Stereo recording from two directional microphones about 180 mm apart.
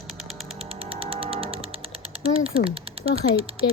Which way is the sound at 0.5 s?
30° right (ahead or behind).